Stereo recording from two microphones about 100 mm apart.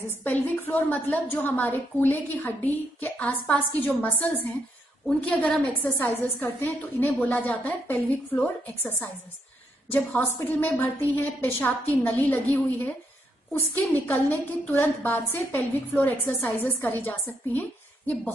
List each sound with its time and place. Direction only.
0.2 s a woman's voice: 15° left (ahead or behind)
14.0 s a woman's voice: 20° left (ahead or behind)